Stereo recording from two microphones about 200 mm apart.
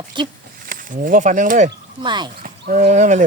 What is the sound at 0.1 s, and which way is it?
Speech, 25° right (ahead or behind).